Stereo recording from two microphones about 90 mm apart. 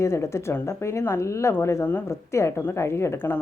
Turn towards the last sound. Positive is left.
turn(degrees=25)  # may be behind; listen again after turning